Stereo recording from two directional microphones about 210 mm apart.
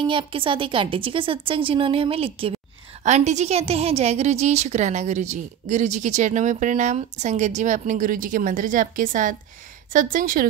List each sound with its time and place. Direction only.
0.0 s a woman's voice: 25° right (ahead or behind); by 10.5 s 40° right (ahead or behind)